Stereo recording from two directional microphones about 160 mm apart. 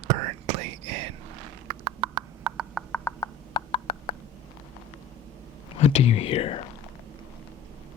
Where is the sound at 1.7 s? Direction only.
30° right (ahead or behind).